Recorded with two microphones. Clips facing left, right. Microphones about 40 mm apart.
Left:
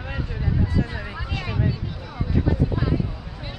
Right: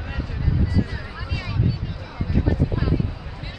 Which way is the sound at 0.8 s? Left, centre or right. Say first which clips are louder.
Even; centre.